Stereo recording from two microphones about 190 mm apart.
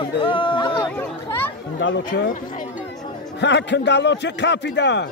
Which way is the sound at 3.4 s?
70° left (ahead or behind).